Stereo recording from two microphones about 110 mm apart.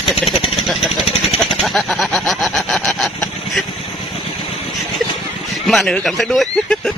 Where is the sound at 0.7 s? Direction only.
Centre (ahead or behind).